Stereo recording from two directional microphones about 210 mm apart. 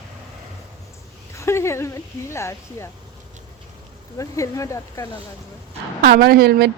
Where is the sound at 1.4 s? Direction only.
15° left (ahead or behind).